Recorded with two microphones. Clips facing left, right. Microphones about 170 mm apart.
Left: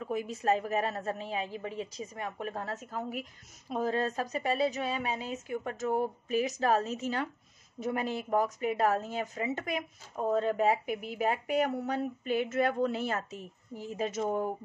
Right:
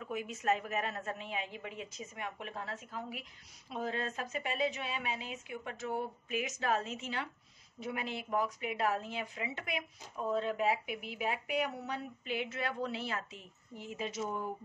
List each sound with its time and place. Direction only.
0.0 s a woman's voice: 35° left (ahead or behind)